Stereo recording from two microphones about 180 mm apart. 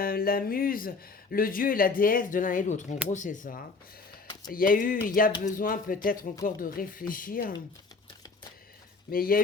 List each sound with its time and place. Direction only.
0.0 s speech: 55° left (ahead or behind)
9.0 s speech: 55° left (ahead or behind)